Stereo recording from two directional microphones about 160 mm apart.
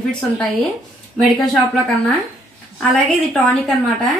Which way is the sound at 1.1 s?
Centre (ahead or behind).